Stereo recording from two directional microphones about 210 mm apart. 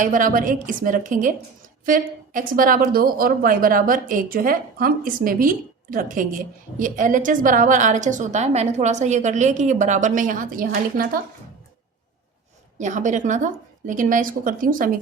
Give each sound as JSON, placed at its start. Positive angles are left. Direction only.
{"t": 0.0, "sound": "speech", "side_deg": -40}
{"t": 12.8, "sound": "speech", "side_deg": -35}